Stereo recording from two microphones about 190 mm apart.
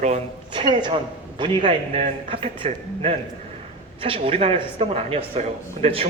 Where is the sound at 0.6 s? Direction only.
25° right (ahead or behind).